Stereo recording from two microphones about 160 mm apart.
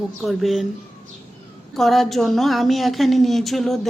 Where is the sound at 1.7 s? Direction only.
Centre (ahead or behind).